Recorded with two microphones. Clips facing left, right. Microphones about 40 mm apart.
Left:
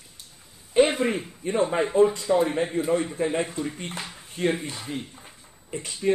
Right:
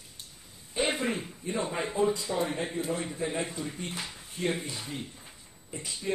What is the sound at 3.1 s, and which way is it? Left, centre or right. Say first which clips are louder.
Speech: left 6 dB; left.